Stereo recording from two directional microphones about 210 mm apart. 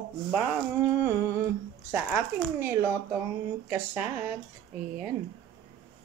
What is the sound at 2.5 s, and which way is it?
Speech, 10° right (ahead or behind).